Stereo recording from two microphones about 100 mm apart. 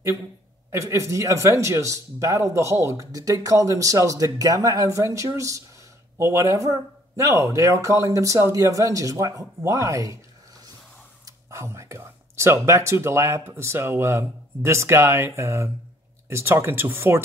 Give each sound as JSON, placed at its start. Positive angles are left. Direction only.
{"t": 0.7, "sound": "speech", "side_deg": -30}
{"t": 11.2, "sound": "speech", "side_deg": -30}